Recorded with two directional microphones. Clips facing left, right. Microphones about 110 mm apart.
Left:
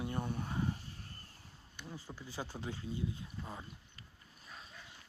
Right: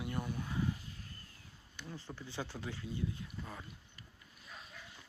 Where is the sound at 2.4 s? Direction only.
25° left (ahead or behind).